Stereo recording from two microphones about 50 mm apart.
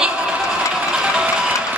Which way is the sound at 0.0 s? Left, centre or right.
Centre.